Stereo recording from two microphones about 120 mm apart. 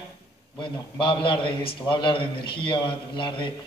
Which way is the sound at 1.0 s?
45° left (ahead or behind).